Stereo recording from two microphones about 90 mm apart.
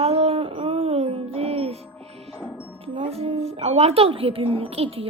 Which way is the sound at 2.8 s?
90° right.